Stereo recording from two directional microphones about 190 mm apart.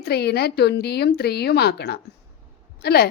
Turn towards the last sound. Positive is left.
turn(degrees=55)  # may be behind; listen again after turning